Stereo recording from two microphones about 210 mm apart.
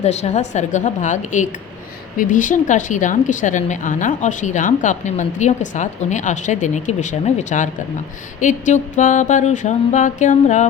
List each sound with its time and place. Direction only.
0.0 s a woman's voice: 30° left (ahead or behind)